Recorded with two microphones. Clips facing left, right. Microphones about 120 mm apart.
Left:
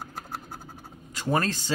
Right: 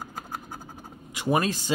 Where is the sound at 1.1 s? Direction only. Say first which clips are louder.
Right 2 dB; 10° right (ahead or behind).